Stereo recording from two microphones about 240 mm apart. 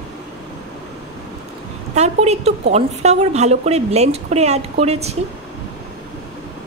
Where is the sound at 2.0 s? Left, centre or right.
Right.